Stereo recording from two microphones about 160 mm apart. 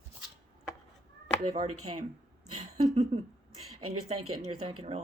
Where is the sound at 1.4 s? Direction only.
40° right (ahead or behind).